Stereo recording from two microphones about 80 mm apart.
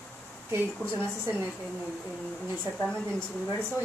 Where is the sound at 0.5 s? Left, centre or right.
Right.